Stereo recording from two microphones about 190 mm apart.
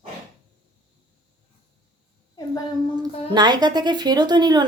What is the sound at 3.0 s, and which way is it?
A woman's voice, 20° right (ahead or behind).